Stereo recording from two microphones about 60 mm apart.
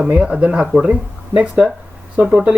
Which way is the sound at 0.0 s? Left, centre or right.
Centre.